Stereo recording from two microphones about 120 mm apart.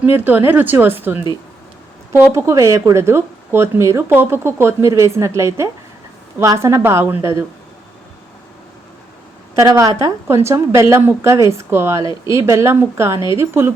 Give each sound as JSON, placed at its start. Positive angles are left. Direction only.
{"t": 0.3, "sound": "speech", "side_deg": -15}
{"t": 2.1, "sound": "speech", "side_deg": -25}
{"t": 9.6, "sound": "speech", "side_deg": -25}